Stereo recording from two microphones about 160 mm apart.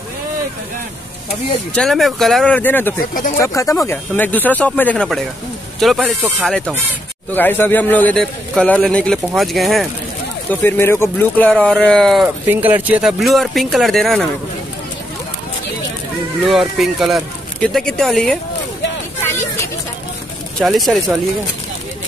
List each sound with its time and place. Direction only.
1.7 s speech: 5° left (ahead or behind)
10.5 s speech: 10° left (ahead or behind)
12.4 s speech: 10° right (ahead or behind)
16.4 s speech: centre (ahead or behind)
19.2 s a sound: 15° left (ahead or behind)
20.5 s speech: centre (ahead or behind)